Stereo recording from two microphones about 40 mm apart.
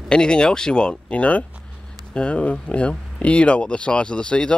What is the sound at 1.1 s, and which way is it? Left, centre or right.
Speech, left.